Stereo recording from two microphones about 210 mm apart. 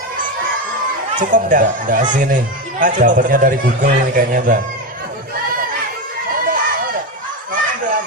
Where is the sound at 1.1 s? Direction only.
40° right (ahead or behind).